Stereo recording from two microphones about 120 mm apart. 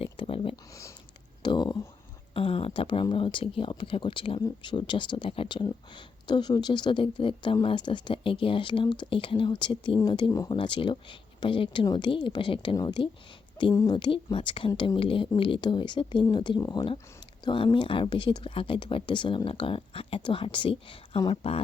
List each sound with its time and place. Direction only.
0.0 s a sound: 50° left (ahead or behind)
0.5 s speech: 25° left (ahead or behind)
1.4 s speech: 40° left (ahead or behind)
2.3 s speech: 50° left (ahead or behind); by 10.6 s 35° left (ahead or behind)
10.6 s a woman's voice: 45° left (ahead or behind)
17.4 s speech: 40° left (ahead or behind)